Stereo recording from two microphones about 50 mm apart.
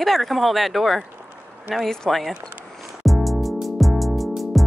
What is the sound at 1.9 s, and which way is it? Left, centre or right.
Speech, centre.